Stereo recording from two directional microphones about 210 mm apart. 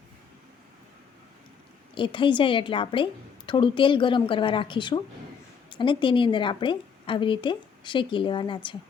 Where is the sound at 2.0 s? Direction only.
25° left (ahead or behind).